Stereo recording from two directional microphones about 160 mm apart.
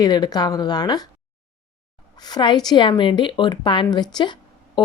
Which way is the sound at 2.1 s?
25° left (ahead or behind).